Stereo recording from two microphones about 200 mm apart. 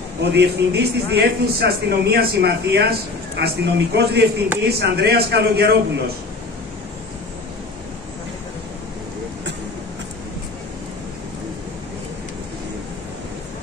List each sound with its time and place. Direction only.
0.2 s a man's voice: 55° right (ahead or behind)